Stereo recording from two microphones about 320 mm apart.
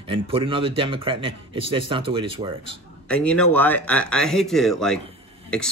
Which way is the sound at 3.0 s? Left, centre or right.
Centre.